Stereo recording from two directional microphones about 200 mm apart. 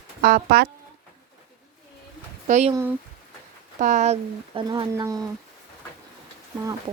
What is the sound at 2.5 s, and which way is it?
Speech, 35° right (ahead or behind).